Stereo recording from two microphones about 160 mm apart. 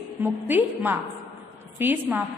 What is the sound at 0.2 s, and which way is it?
A woman's voice, 10° right (ahead or behind).